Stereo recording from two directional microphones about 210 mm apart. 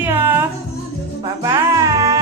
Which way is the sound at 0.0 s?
10° right (ahead or behind).